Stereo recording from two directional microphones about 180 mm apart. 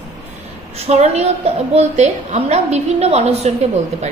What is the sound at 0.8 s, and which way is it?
A woman's voice, 35° right (ahead or behind).